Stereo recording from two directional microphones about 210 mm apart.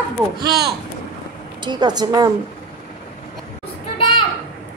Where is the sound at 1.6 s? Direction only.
20° right (ahead or behind).